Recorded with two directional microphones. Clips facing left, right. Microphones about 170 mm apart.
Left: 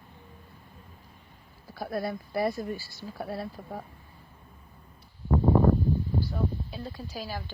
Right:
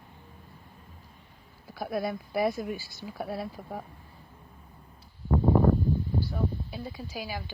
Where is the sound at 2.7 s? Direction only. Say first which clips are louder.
Even; 15° right (ahead or behind).